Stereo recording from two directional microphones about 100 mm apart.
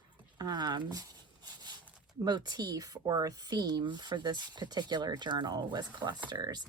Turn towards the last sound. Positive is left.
turn(degrees=-45)  # may be behind; listen again after turning